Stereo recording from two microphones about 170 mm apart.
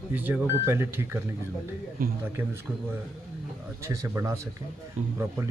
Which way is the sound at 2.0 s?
60° right (ahead or behind).